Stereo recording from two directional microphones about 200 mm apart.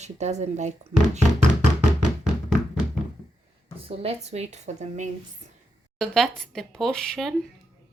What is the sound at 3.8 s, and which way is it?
Speech, 30° right (ahead or behind).